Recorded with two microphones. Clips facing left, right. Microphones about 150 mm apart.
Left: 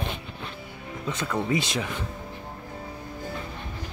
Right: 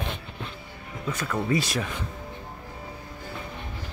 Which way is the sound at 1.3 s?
20° left (ahead or behind).